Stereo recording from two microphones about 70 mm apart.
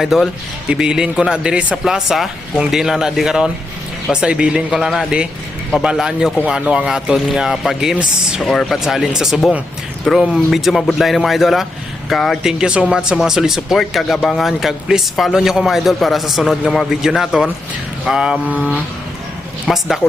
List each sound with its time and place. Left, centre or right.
0.0 s speech: centre
12.4 s speech: centre
18.4 s speech: right
19.6 s speech: centre